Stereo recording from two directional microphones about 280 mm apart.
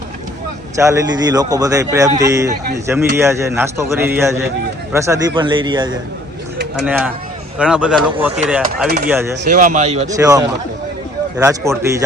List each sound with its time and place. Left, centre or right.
0.8 s a man's voice: centre
6.7 s a man's voice: centre
9.4 s speech: right
10.2 s a man's voice: centre